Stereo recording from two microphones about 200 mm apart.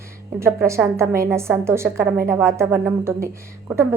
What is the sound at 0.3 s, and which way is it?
A woman's voice, 15° right (ahead or behind).